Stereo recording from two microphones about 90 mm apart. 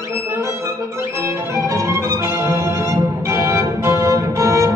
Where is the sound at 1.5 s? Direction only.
30° right (ahead or behind).